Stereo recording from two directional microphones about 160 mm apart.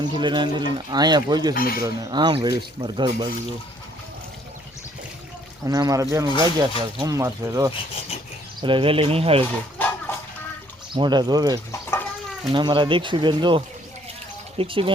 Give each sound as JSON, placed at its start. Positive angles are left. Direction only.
{"t": 0.0, "sound": "speech", "side_deg": -30}
{"t": 1.5, "sound": "speech", "side_deg": 65}
{"t": 1.8, "sound": "speech", "side_deg": -25}
{"t": 5.6, "sound": "speech", "side_deg": -20}
{"t": 7.7, "sound": "speech", "side_deg": 35}
{"t": 8.6, "sound": "speech", "side_deg": -35}
{"t": 9.7, "sound": "a sound", "side_deg": 10}
{"t": 10.9, "sound": "speech", "side_deg": -25}
{"t": 14.6, "sound": "speech", "side_deg": -35}